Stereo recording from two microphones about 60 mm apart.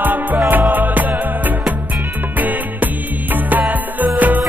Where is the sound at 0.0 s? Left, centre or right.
Right.